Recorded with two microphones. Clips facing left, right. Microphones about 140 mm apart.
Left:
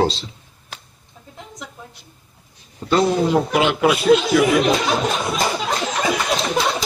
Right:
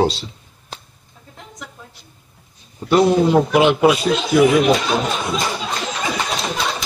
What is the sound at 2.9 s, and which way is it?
A man's voice, 15° right (ahead or behind).